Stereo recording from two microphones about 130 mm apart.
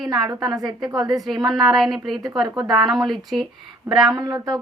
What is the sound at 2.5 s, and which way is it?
Speech, 35° right (ahead or behind).